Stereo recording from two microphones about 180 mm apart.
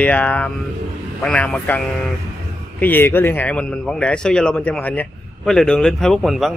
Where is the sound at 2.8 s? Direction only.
10° left (ahead or behind).